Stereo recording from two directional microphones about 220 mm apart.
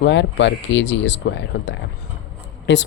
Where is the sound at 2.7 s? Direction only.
55° left (ahead or behind).